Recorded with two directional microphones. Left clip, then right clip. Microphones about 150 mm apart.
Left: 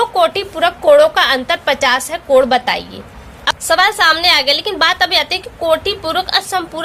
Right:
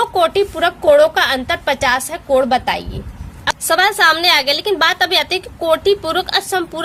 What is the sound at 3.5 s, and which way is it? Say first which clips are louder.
A woman's voice: left 2 dB; 35° right (ahead or behind).